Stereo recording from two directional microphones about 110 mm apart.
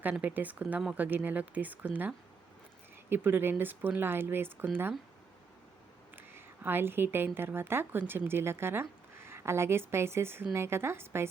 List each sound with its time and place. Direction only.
0.0 s speech: 10° right (ahead or behind)
6.1 s a woman's voice: 20° right (ahead or behind)